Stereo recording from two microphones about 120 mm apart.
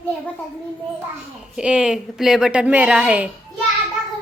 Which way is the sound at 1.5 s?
10° right (ahead or behind).